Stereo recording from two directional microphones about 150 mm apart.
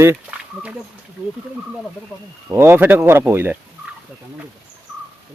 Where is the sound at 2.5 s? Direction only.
15° right (ahead or behind).